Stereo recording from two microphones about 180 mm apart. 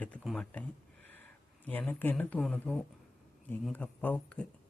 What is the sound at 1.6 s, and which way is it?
Speech, 10° left (ahead or behind).